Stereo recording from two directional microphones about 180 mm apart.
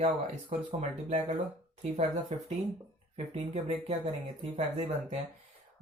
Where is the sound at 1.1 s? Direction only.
40° right (ahead or behind).